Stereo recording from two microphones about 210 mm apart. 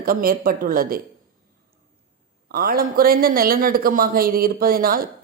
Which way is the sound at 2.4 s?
45° right (ahead or behind).